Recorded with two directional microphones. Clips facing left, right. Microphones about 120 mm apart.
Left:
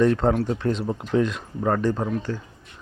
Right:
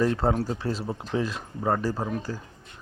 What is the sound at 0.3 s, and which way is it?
Speech, 35° right (ahead or behind).